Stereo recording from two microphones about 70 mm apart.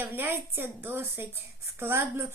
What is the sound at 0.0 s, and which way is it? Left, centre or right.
A woman's voice, right.